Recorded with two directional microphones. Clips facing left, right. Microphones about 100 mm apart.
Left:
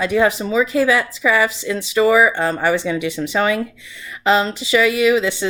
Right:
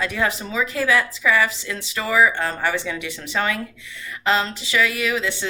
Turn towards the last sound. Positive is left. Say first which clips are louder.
# left 8 dB
turn(degrees=20)  # may be behind; listen again after turning